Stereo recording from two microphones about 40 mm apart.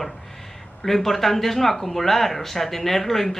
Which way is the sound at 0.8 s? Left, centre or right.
Centre.